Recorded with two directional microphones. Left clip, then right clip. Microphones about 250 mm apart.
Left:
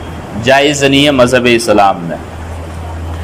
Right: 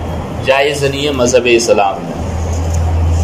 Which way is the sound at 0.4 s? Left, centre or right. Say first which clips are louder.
Left 3 dB; left.